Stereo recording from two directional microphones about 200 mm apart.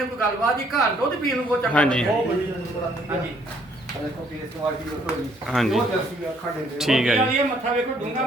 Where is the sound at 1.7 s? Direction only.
5° left (ahead or behind).